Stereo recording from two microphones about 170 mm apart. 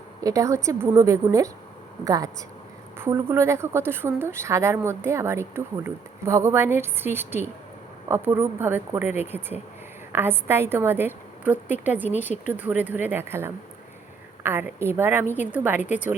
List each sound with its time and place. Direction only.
0.2 s a woman's voice: 20° right (ahead or behind)